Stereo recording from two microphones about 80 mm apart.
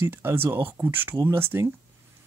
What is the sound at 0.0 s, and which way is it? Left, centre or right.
Speech, right.